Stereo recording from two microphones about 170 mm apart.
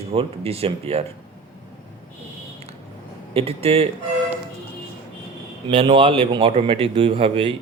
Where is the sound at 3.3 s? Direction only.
35° right (ahead or behind).